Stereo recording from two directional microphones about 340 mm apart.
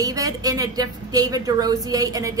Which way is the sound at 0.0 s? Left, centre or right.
Centre.